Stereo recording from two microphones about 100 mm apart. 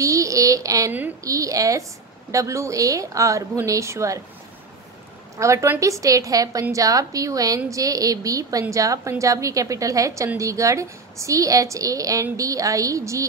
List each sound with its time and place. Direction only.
0.0 s a sound: 35° right (ahead or behind)
1.2 s a woman's voice: 35° right (ahead or behind)
5.4 s a woman's voice: 30° right (ahead or behind)